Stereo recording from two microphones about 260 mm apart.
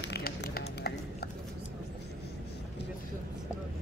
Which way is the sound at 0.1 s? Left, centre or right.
Left.